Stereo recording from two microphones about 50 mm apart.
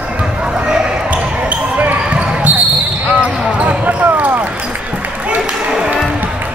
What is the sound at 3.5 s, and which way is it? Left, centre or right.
Basketball bounce, right.